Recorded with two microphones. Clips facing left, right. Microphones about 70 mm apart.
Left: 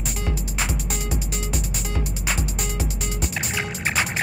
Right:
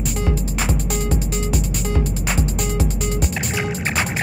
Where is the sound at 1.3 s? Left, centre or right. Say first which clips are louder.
Right 6 dB; right.